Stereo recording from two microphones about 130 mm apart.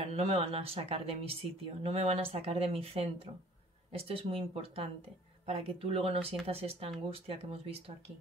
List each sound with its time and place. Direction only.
0.1 s speech: 50° right (ahead or behind)